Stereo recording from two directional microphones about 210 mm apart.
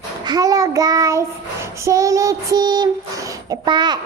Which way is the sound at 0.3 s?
15° right (ahead or behind).